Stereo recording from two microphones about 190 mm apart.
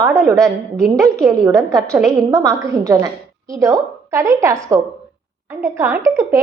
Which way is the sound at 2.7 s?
15° right (ahead or behind).